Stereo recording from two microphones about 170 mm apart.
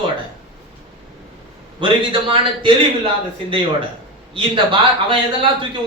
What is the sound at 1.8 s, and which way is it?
A man's voice, 30° right (ahead or behind).